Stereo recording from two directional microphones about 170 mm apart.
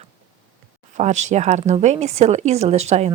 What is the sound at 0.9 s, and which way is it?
Speech, 45° right (ahead or behind).